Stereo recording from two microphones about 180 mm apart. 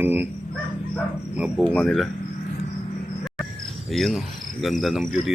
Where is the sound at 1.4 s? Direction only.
Centre (ahead or behind).